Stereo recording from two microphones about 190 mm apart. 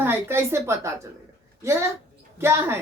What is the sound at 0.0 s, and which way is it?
Speech, 10° right (ahead or behind).